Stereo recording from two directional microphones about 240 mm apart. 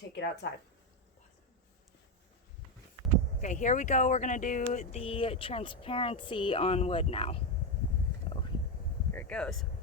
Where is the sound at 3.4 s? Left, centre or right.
Left.